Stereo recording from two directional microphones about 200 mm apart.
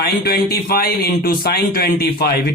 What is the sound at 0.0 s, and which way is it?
Speech, 50° left (ahead or behind).